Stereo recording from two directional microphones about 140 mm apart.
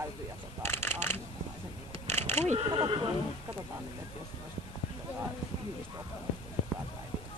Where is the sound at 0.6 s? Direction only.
15° left (ahead or behind).